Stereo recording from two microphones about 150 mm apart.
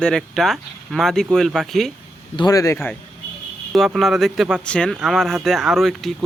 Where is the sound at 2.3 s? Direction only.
25° left (ahead or behind).